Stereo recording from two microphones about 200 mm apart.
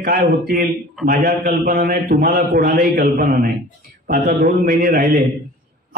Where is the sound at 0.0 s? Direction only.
45° right (ahead or behind).